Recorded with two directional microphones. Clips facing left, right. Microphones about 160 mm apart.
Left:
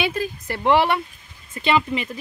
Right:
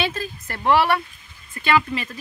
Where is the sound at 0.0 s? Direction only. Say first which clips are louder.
Left 2 dB; 15° left (ahead or behind).